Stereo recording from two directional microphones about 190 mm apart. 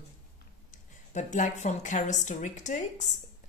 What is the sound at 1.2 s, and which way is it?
Speech, 40° left (ahead or behind).